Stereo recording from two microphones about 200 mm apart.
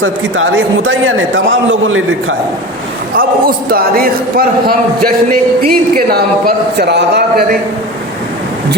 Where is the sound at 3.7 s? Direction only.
45° right (ahead or behind).